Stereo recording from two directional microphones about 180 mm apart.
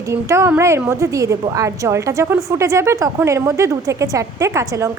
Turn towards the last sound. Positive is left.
turn(degrees=-15)  # may be behind; listen again after turning